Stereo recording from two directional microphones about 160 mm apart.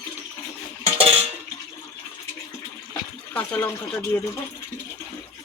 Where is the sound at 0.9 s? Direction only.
40° right (ahead or behind).